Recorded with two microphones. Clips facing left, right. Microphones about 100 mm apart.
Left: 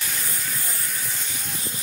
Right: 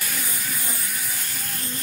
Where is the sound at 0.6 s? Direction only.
5° right (ahead or behind).